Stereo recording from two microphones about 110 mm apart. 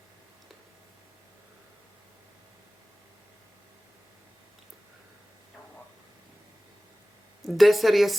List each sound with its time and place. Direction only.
7.4 s a woman's voice: centre (ahead or behind)